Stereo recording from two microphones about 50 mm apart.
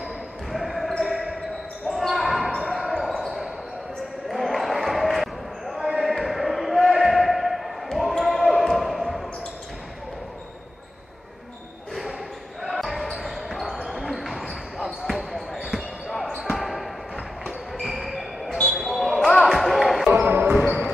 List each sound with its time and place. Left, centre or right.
0.5 s basketball bounce: centre
3.2 s basketball bounce: centre
12.6 s basketball bounce: centre
15.0 s basketball bounce: centre
20.1 s basketball bounce: right